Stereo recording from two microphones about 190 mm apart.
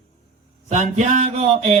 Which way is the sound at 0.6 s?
40° right (ahead or behind).